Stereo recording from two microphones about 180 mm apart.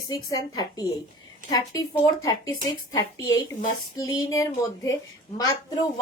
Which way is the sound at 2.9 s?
20° left (ahead or behind).